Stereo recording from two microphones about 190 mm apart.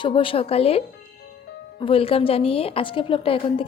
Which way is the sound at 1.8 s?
30° left (ahead or behind).